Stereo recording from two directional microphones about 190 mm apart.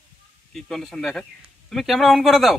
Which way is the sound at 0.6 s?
Centre (ahead or behind).